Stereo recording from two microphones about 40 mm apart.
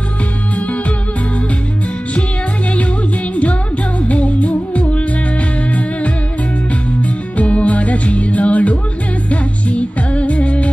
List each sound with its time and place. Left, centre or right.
0.6 s music: left
3.3 s music: left